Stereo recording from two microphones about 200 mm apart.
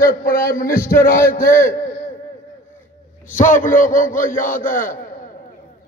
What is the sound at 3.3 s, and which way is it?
Speech, 40° left (ahead or behind).